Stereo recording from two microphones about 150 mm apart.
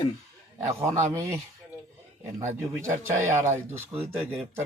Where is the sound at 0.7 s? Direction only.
20° right (ahead or behind).